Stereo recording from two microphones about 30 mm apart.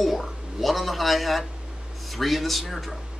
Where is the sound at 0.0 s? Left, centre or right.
Centre.